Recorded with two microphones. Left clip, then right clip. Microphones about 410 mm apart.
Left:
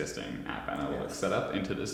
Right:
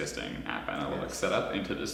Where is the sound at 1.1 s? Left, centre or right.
Left.